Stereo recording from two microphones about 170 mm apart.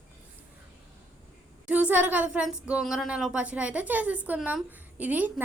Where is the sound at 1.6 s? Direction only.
10° right (ahead or behind).